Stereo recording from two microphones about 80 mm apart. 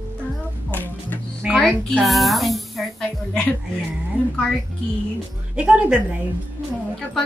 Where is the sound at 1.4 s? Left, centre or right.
Centre.